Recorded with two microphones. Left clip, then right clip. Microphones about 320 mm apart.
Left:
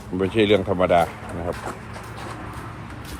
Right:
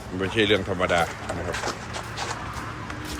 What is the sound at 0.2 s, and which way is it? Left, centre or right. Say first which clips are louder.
Speech: left 3 dB; centre.